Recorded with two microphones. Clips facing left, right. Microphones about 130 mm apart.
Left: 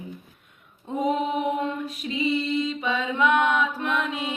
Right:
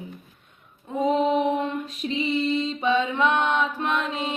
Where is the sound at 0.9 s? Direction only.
30° left (ahead or behind).